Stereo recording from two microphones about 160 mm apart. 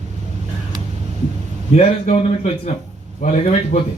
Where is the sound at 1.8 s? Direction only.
40° left (ahead or behind).